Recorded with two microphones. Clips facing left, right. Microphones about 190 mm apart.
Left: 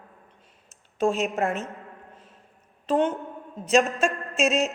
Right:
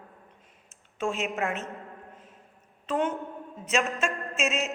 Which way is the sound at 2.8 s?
30° left (ahead or behind).